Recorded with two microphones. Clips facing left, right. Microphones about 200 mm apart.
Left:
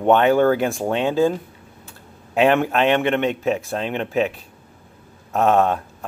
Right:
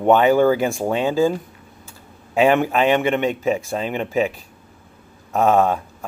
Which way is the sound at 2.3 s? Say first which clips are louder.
Right 1 dB; 5° right (ahead or behind).